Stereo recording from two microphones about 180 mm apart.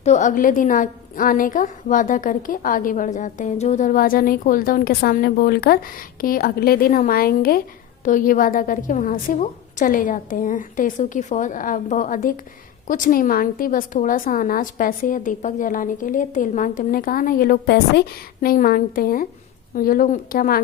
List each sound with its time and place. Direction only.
0.0 s a woman's voice: 40° left (ahead or behind)